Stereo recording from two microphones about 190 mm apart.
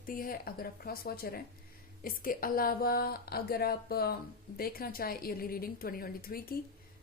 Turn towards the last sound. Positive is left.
turn(degrees=50)  # may be behind; listen again after turning